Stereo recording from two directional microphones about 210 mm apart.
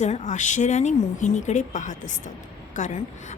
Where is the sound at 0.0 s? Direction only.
35° left (ahead or behind).